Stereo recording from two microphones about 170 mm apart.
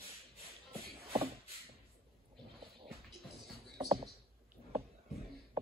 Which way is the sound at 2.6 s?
35° right (ahead or behind).